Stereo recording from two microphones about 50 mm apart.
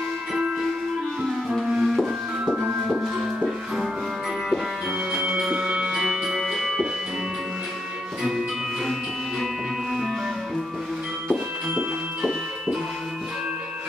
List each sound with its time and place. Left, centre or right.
1.5 s music: centre
3.2 s music: right
5.1 s music: right; by 6.9 s centre
12.2 s music: centre